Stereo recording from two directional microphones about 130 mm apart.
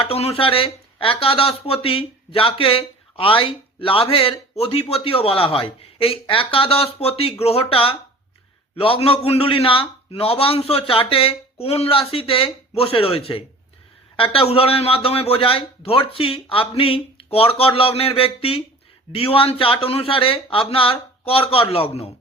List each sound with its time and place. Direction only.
0.0 s speech: 50° left (ahead or behind)